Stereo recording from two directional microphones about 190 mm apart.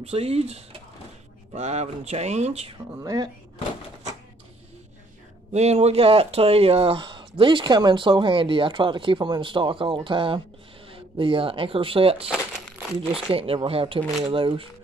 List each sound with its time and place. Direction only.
0.0 s speech: 30° right (ahead or behind)
3.0 s speech: 20° right (ahead or behind)
5.5 s speech: 35° right (ahead or behind)